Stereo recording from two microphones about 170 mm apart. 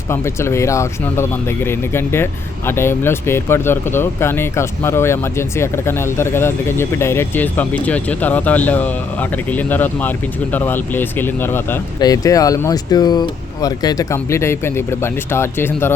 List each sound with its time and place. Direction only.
0.1 s speech: 15° left (ahead or behind)